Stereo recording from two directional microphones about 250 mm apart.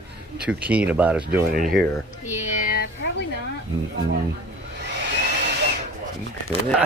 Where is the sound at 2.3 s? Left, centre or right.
Left.